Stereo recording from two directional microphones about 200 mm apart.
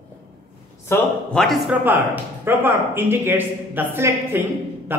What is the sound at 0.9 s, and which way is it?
Speech, 5° left (ahead or behind).